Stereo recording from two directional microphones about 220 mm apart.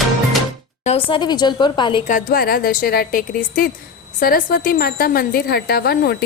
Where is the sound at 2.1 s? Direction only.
40° left (ahead or behind).